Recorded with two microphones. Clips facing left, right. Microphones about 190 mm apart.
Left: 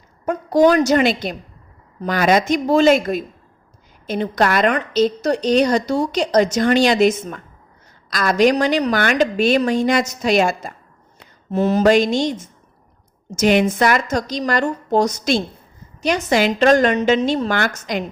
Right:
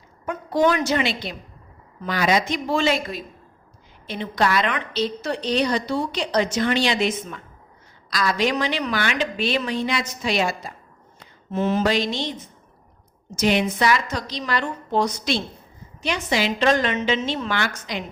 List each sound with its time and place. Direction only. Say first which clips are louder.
0.3 s a woman's voice: left 6 dB; 40° left (ahead or behind)